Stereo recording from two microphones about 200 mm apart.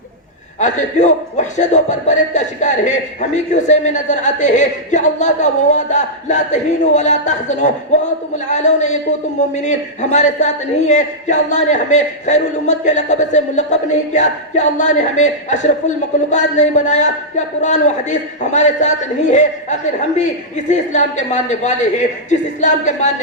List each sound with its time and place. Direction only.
0.6 s a man's voice: 35° left (ahead or behind)
20.7 s a man's voice: 35° left (ahead or behind)